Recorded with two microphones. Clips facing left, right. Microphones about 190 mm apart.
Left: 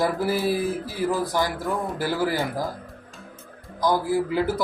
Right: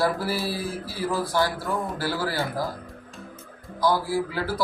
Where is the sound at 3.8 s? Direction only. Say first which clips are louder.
Left 1 dB; 20° left (ahead or behind).